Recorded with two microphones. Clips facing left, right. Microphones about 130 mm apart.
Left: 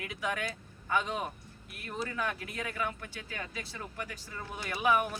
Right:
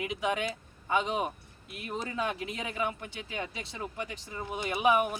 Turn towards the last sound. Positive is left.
turn(degrees=-20)  # may be behind; listen again after turning